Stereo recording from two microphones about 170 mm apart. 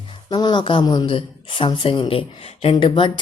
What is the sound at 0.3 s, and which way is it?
Speech, 25° left (ahead or behind).